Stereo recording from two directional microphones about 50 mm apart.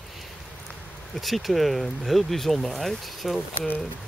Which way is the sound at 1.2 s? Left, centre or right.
Centre.